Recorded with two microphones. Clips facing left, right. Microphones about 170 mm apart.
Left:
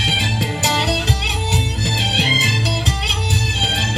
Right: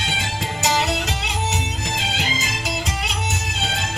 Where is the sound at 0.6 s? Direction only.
35° left (ahead or behind).